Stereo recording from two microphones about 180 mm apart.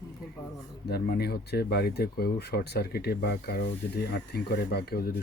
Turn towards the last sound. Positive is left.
turn(degrees=60)  # may be behind; listen again after turning